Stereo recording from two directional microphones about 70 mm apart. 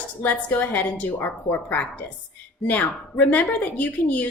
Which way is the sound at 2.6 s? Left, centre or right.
Left.